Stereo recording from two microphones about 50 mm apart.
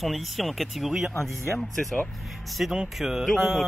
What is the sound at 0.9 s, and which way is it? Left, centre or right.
Speech, centre.